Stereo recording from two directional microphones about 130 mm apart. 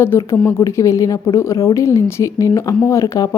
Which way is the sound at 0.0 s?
20° left (ahead or behind).